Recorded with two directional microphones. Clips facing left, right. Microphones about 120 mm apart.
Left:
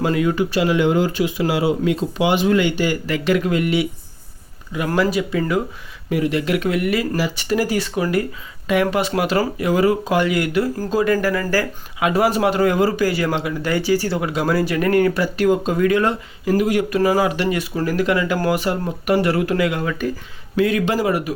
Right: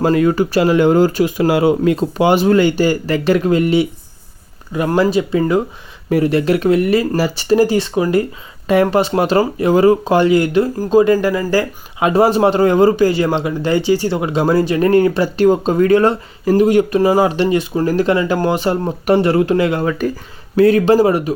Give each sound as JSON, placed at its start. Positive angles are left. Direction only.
{"t": 0.0, "sound": "speech", "side_deg": -40}
{"t": 4.9, "sound": "speech", "side_deg": -25}
{"t": 6.1, "sound": "speech", "side_deg": -40}